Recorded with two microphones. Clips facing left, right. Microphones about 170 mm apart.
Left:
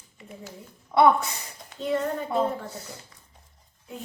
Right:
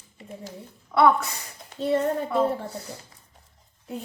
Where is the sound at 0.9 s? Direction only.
20° left (ahead or behind).